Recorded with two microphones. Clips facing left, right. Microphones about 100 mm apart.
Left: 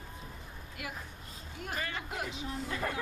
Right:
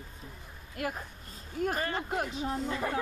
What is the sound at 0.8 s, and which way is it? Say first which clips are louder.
Speech: right 8 dB; 45° right (ahead or behind).